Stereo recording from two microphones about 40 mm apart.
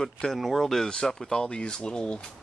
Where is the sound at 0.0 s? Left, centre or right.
Centre.